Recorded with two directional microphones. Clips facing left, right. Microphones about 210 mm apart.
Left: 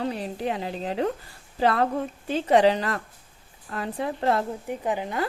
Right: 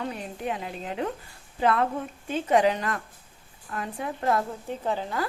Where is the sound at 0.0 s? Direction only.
35° left (ahead or behind).